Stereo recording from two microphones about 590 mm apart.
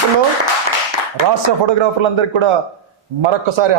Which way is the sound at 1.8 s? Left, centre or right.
Right.